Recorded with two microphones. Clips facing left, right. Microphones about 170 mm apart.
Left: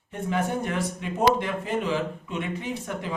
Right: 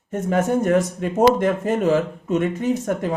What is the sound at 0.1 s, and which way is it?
Speech, 45° right (ahead or behind).